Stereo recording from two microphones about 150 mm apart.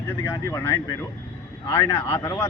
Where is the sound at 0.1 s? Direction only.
20° left (ahead or behind).